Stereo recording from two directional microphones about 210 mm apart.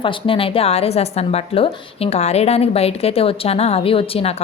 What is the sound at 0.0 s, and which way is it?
Speech, 25° left (ahead or behind).